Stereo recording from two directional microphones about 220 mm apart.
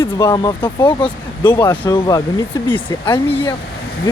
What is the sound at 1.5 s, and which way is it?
Speech, 10° left (ahead or behind).